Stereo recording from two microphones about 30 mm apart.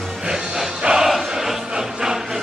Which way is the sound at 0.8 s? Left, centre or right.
Right.